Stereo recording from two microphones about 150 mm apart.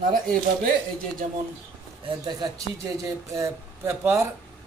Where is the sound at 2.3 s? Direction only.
25° right (ahead or behind).